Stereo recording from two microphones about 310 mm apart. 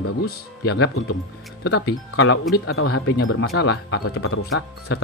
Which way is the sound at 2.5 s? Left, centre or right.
Left.